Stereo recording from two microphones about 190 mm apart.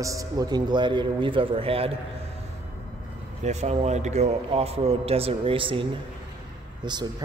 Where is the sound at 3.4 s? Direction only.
35° right (ahead or behind).